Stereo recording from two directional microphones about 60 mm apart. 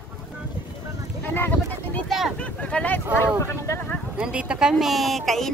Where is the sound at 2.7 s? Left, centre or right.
Centre.